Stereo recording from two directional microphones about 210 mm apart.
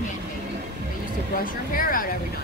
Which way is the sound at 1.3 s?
40° left (ahead or behind).